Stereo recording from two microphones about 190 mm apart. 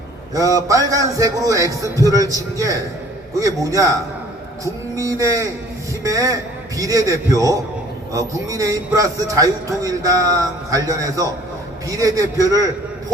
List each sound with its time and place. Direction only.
0.3 s a man's voice: 15° right (ahead or behind)